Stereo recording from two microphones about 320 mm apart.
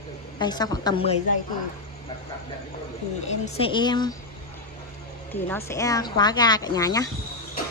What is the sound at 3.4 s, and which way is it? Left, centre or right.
Speech, centre.